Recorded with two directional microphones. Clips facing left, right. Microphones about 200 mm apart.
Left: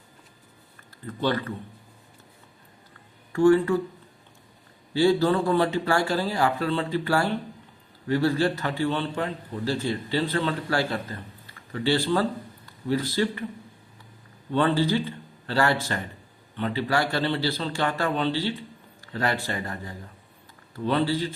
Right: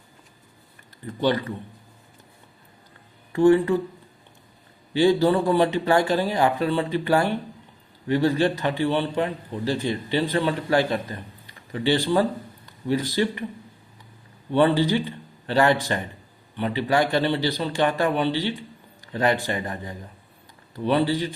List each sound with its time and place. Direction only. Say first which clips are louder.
1.0 s a man's voice: right 3 dB; 15° right (ahead or behind)
3.3 s a man's voice: right 2 dB; 20° right (ahead or behind)
4.9 s a man's voice: right 2 dB; 15° right (ahead or behind)
14.5 s a man's voice: right 3 dB; 15° right (ahead or behind)